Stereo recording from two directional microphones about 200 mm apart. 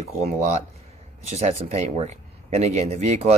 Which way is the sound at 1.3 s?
30° right (ahead or behind).